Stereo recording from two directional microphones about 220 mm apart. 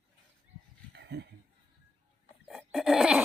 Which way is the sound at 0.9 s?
50° right (ahead or behind).